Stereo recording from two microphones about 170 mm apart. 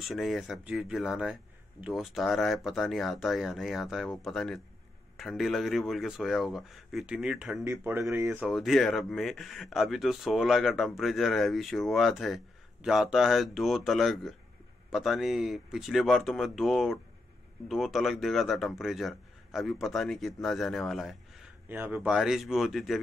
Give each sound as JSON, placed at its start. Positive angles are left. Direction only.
{"t": 0.0, "sound": "speech", "side_deg": 0}
{"t": 7.6, "sound": "speech", "side_deg": -15}
{"t": 8.5, "sound": "speech", "side_deg": 0}
{"t": 21.6, "sound": "speech", "side_deg": -10}